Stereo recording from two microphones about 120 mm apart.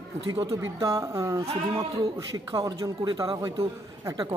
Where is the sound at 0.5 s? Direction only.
30° right (ahead or behind).